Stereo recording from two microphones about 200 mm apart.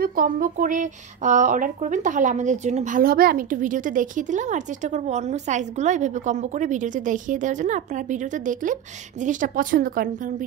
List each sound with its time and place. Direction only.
0.0 s speech: 45° right (ahead or behind)